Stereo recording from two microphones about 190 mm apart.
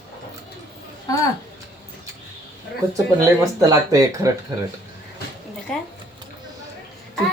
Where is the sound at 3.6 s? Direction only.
15° right (ahead or behind).